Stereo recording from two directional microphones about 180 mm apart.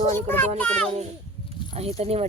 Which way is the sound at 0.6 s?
5° left (ahead or behind).